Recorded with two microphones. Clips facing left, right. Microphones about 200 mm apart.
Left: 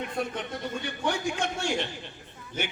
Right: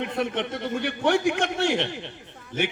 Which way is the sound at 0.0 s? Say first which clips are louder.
Right 5 dB; 65° right (ahead or behind).